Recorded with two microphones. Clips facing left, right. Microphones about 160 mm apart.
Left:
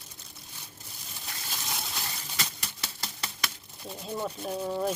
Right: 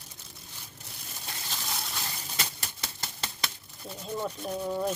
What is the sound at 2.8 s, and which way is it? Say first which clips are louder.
Typewriter: even; 25° right (ahead or behind).